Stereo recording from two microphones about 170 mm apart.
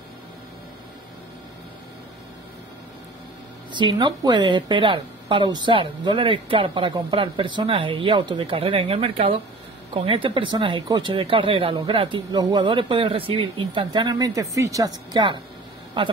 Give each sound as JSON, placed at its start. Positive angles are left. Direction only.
{"t": 3.7, "sound": "a woman's voice", "side_deg": -25}